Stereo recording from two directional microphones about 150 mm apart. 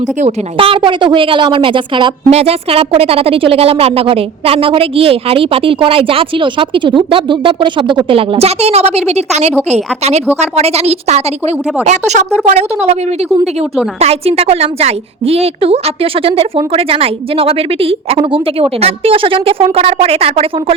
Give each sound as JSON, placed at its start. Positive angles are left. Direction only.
{"t": 0.0, "sound": "a woman's voice", "side_deg": -50}
{"t": 0.5, "sound": "a woman's voice", "side_deg": -35}